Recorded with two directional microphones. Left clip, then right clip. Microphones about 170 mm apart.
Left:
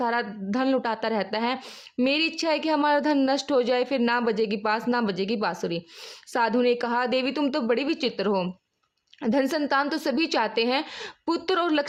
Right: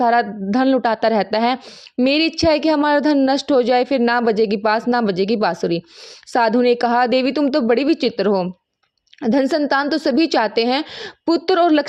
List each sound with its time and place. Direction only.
0.0 s a woman's voice: 35° right (ahead or behind)